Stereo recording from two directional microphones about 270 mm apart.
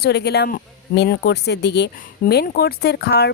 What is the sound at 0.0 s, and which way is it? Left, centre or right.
Speech, left.